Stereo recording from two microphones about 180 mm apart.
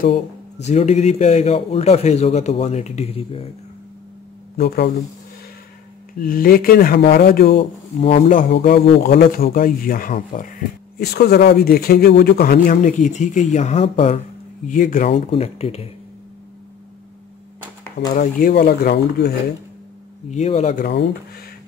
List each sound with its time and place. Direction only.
0.7 s a man's voice: 40° left (ahead or behind)
4.6 s speech: 60° left (ahead or behind)
6.1 s speech: 50° left (ahead or behind)
7.5 s a man's voice: 35° left (ahead or behind)
8.3 s speech: 55° left (ahead or behind)
11.0 s speech: 60° left (ahead or behind); by 14.2 s 30° left (ahead or behind)
14.7 s speech: 50° left (ahead or behind)
15.0 s a man's voice: 35° left (ahead or behind)
18.1 s speech: 50° left (ahead or behind)
20.2 s a man's voice: 40° left (ahead or behind)
20.8 s speech: 70° left (ahead or behind)